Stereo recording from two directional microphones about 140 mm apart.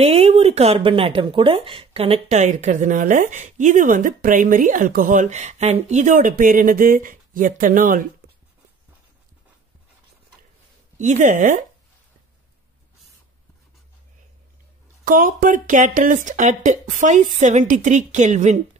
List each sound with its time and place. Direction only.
0.0 s speech: 50° right (ahead or behind); by 8.1 s 75° right (ahead or behind)
11.0 s speech: 60° right (ahead or behind)
15.0 s speech: 80° right; by 18.6 s 60° right (ahead or behind)